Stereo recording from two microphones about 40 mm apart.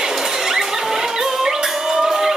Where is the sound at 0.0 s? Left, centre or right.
Centre.